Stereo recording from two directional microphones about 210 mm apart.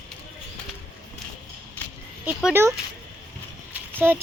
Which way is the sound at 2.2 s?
10° right (ahead or behind).